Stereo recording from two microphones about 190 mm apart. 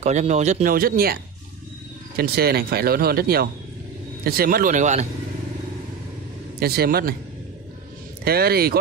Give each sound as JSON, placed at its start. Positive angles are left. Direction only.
{"t": 0.0, "sound": "speech", "side_deg": -35}
{"t": 2.1, "sound": "speech", "side_deg": -55}
{"t": 6.6, "sound": "speech", "side_deg": -55}
{"t": 8.2, "sound": "speech", "side_deg": -55}